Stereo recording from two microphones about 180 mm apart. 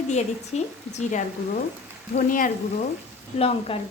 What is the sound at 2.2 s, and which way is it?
Speech, 50° left (ahead or behind).